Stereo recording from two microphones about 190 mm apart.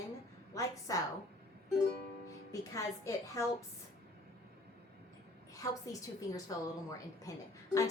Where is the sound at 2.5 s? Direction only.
15° left (ahead or behind).